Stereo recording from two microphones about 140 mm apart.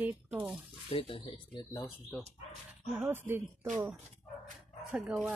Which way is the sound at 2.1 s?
10° left (ahead or behind).